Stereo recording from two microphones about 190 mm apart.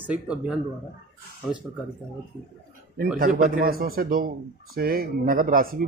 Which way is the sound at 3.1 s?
50° right (ahead or behind).